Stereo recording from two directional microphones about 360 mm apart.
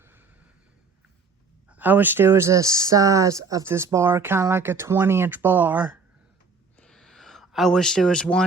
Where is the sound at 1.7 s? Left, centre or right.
Centre.